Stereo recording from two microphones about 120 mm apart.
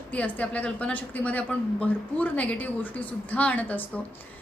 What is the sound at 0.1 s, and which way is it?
A woman's voice, 10° left (ahead or behind).